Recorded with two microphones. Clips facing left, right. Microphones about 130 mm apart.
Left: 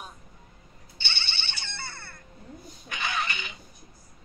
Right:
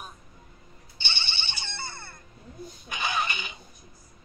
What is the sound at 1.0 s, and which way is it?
Ringtone, 15° right (ahead or behind).